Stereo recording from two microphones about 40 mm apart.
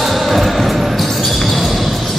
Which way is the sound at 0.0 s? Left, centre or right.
Centre.